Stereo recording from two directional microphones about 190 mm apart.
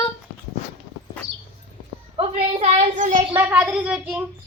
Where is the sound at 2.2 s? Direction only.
30° right (ahead or behind).